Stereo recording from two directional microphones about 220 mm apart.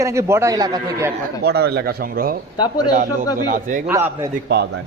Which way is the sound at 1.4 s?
45° right (ahead or behind).